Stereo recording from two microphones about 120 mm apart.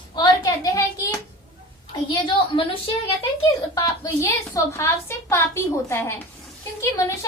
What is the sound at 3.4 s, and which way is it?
A woman's voice, 25° left (ahead or behind).